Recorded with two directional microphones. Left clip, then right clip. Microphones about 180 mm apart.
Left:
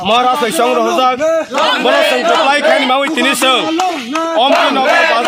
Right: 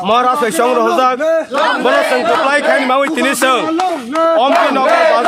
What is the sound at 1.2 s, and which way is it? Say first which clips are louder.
Speech: even; 30° left (ahead or behind).